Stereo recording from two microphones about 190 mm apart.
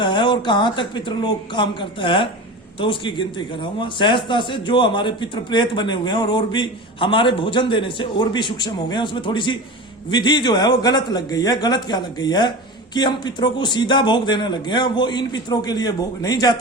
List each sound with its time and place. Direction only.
0.0 s a man's voice: 25° left (ahead or behind)